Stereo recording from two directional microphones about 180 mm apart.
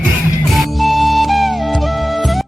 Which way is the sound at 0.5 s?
Centre (ahead or behind).